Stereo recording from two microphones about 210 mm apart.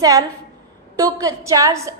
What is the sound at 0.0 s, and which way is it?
A woman's voice, 15° right (ahead or behind).